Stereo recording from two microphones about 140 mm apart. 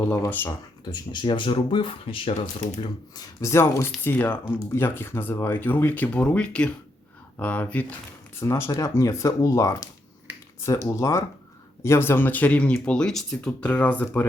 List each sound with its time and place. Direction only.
0.4 s speech: 30° left (ahead or behind)
2.8 s speech: 25° left (ahead or behind)